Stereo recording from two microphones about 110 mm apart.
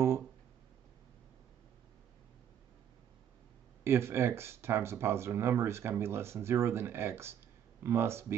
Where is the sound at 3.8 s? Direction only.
25° right (ahead or behind).